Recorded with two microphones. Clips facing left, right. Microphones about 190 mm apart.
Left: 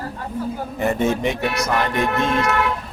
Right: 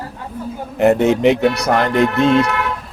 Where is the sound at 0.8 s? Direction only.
70° right (ahead or behind).